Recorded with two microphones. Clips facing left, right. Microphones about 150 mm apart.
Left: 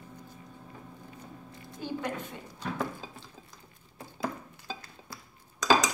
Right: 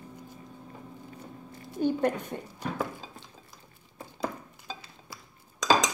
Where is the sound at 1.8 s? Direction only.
50° right (ahead or behind).